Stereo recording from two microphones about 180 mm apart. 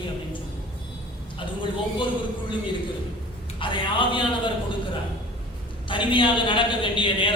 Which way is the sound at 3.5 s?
25° left (ahead or behind).